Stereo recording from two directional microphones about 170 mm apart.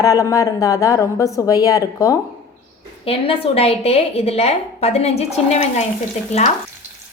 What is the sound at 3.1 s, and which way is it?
A woman's voice, 35° left (ahead or behind).